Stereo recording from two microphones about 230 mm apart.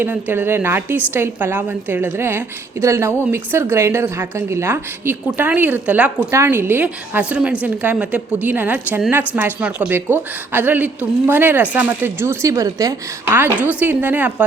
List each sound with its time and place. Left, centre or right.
0.0 s a woman's voice: centre